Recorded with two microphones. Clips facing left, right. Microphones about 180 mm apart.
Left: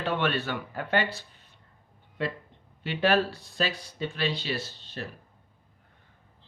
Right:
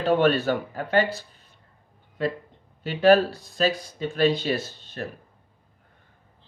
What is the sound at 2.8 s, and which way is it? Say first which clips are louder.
Speech: right 7 dB; 40° right (ahead or behind).